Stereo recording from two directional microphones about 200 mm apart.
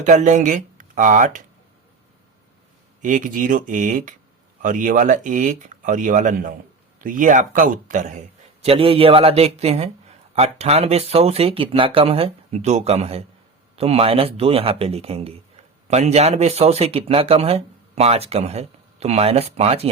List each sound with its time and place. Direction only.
0.0 s speech: 35° right (ahead or behind)
3.0 s speech: 40° right (ahead or behind)
8.6 s speech: 30° right (ahead or behind)